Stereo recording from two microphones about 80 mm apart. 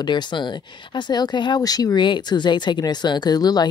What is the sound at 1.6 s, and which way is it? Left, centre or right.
Speech, left.